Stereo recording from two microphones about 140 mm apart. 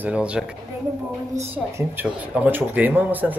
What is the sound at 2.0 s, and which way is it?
A man's voice, 10° right (ahead or behind).